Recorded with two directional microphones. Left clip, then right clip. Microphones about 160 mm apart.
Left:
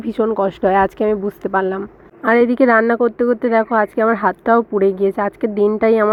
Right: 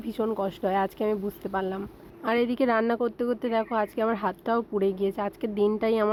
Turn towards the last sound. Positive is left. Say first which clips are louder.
# left 10 dB
turn(degrees=25)  # may be behind; listen again after turning